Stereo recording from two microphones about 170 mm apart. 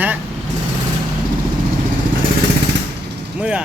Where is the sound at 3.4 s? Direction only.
10° right (ahead or behind).